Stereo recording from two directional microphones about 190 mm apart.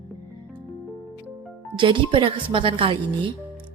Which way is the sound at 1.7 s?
25° right (ahead or behind).